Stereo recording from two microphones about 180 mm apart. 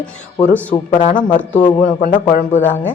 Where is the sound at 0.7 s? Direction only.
30° left (ahead or behind).